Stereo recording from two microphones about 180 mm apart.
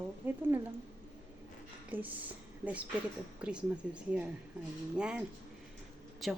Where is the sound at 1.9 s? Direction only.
10° right (ahead or behind).